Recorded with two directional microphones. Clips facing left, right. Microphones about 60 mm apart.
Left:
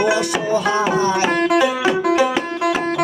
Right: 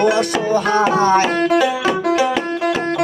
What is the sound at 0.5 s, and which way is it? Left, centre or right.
Music, right.